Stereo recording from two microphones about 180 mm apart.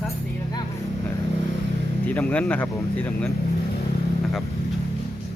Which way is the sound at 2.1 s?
10° left (ahead or behind).